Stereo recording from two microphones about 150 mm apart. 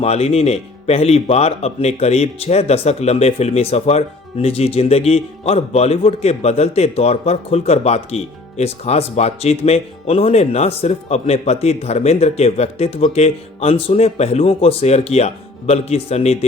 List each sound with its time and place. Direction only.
0.0 s speech: 45° left (ahead or behind)